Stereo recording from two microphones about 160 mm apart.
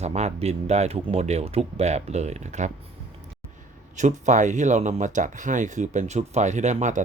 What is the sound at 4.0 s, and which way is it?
Speech, 50° right (ahead or behind).